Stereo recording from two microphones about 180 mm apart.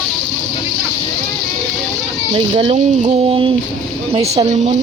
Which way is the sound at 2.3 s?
30° right (ahead or behind).